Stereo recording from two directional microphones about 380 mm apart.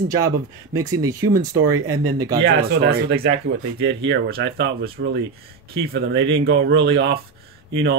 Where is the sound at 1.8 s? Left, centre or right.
Right.